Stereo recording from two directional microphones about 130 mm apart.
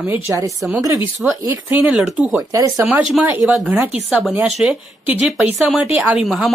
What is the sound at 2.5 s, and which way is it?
Speech, 20° right (ahead or behind).